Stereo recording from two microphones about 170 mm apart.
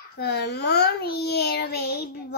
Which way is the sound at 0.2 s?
75° left (ahead or behind).